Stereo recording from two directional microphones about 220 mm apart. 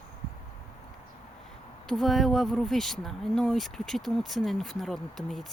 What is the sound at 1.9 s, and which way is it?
Speech, centre (ahead or behind).